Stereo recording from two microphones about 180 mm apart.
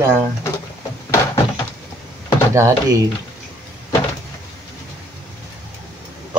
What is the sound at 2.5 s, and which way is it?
Speech, 15° right (ahead or behind).